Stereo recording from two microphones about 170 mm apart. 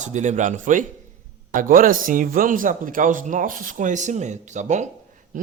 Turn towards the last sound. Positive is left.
turn(degrees=-45)  # may be behind; listen again after turning